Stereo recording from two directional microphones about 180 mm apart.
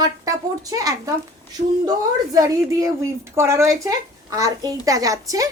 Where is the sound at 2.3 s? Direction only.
15° right (ahead or behind).